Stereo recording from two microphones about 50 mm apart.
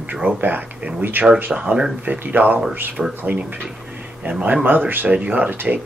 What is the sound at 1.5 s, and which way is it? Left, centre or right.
Speech, right.